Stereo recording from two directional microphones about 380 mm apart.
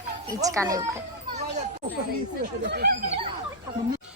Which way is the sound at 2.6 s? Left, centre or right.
Right.